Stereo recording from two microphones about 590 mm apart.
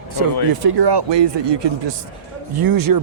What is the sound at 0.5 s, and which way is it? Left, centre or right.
Speech, right.